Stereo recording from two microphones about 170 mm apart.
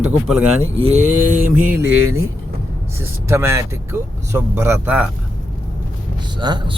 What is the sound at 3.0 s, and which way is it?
Speech, 15° right (ahead or behind).